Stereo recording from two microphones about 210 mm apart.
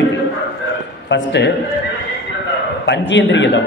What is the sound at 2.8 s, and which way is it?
Speech, 60° left (ahead or behind).